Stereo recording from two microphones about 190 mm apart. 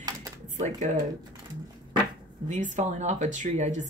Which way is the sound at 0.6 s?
40° right (ahead or behind).